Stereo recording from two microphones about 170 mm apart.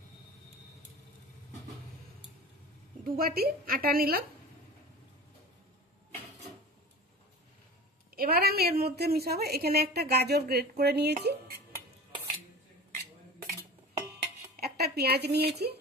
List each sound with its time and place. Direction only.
3.0 s a woman's voice: 60° right (ahead or behind)
8.2 s a woman's voice: 65° right (ahead or behind)
14.6 s a woman's voice: 65° right (ahead or behind)